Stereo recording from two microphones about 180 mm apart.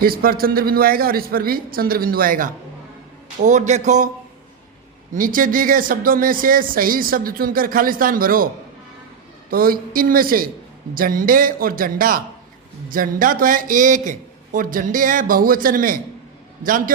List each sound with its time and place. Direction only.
0.0 s a man's voice: 55° right (ahead or behind)
5.1 s speech: 50° right (ahead or behind)
9.5 s speech: 55° right (ahead or behind)